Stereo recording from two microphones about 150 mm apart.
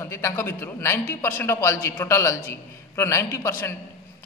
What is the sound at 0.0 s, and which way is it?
A man's voice, 20° left (ahead or behind).